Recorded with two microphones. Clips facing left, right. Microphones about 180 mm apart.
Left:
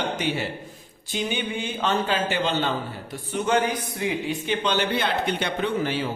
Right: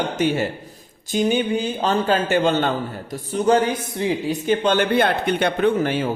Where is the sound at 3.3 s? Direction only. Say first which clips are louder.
Right 5 dB; 35° right (ahead or behind).